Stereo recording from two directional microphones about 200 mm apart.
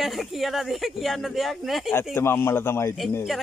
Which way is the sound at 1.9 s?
10° left (ahead or behind).